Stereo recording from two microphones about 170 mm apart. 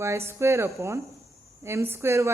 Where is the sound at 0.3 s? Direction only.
15° right (ahead or behind).